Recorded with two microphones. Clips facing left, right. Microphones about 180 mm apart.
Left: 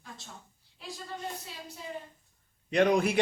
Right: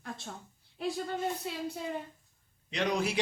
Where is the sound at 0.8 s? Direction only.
60° right (ahead or behind).